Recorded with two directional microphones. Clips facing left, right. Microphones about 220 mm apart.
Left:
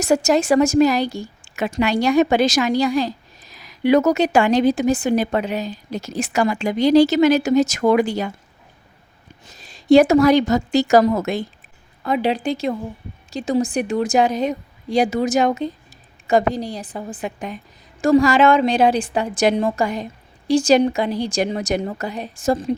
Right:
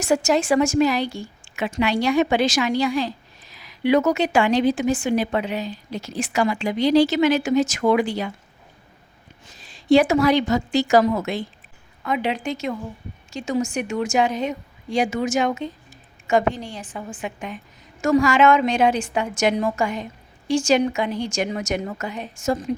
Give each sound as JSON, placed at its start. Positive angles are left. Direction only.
{"t": 0.0, "sound": "a woman's voice", "side_deg": 40}
{"t": 9.6, "sound": "a woman's voice", "side_deg": 40}